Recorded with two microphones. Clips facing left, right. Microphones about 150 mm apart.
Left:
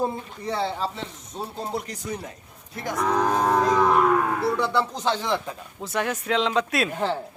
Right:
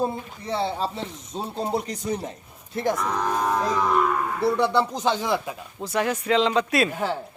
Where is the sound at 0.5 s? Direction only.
20° right (ahead or behind).